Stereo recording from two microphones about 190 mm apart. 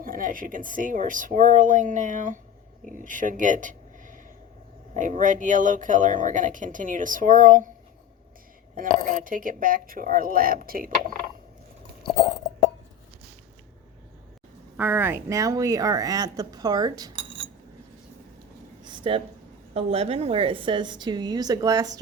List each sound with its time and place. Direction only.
0.0 s speech: 45° right (ahead or behind)
9.0 s speech: 45° right (ahead or behind)
14.8 s speech: 10° right (ahead or behind)
18.8 s a sound: 25° right (ahead or behind)
19.7 s speech: 30° right (ahead or behind)